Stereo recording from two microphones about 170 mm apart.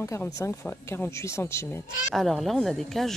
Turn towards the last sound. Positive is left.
turn(degrees=0)  # may be behind; listen again after turning